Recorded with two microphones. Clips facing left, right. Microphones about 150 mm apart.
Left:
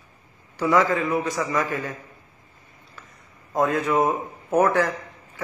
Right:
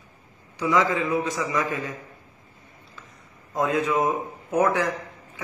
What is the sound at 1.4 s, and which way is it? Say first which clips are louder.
Speech: left 1 dB; 20° right (ahead or behind).